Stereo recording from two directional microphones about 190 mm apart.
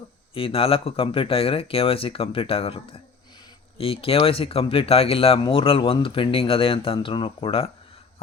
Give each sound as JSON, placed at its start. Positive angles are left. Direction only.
{"t": 0.3, "sound": "speech", "side_deg": 30}